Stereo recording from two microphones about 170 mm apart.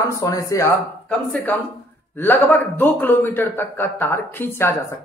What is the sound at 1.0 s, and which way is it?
A man's voice, 5° left (ahead or behind).